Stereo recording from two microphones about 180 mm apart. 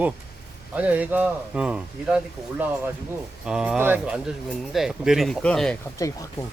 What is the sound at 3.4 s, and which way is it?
Speech, 5° right (ahead or behind).